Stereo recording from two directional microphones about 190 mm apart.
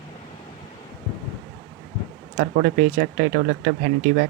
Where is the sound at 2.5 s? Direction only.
45° right (ahead or behind).